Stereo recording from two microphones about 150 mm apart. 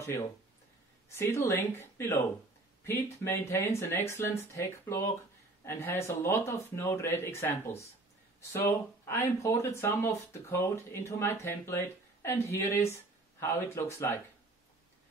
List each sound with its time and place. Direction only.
1.1 s speech: 15° left (ahead or behind)